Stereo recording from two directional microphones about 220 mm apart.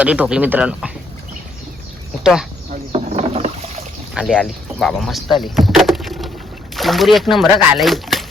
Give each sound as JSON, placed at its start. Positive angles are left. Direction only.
{"t": 0.0, "sound": "speech", "side_deg": -5}
{"t": 2.2, "sound": "speech", "side_deg": -5}
{"t": 2.9, "sound": "a sound", "side_deg": -30}
{"t": 4.1, "sound": "speech", "side_deg": 0}